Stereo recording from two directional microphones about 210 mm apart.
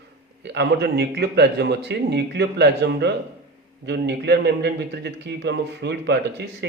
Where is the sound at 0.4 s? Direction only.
55° right (ahead or behind).